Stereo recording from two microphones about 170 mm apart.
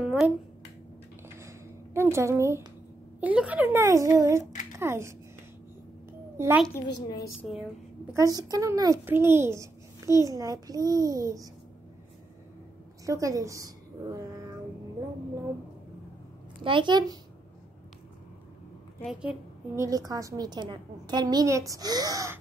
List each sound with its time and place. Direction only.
0.0 s finger snapping: 5° right (ahead or behind)
2.0 s a child's voice: 15° right (ahead or behind)
6.3 s a child's voice: 15° right (ahead or behind)
7.0 s a woman's voice: 25° left (ahead or behind)
8.1 s a child's voice: 20° right (ahead or behind)
13.0 s a woman's voice: 20° right (ahead or behind)
16.6 s a woman's voice: 30° right (ahead or behind)
19.7 s a woman's voice: 20° right (ahead or behind)